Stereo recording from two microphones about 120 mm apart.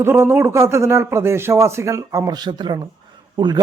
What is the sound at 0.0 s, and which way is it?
A man's voice, 20° right (ahead or behind).